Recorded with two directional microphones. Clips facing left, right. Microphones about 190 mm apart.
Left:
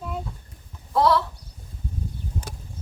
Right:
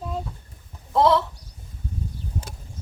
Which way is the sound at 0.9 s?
20° right (ahead or behind).